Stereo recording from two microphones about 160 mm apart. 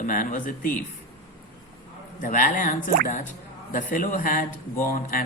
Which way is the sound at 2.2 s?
55° left (ahead or behind).